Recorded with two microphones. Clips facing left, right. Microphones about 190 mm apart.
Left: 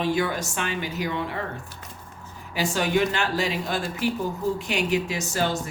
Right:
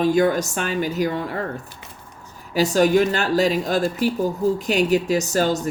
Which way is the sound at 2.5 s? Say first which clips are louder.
Right 7 dB; 40° right (ahead or behind).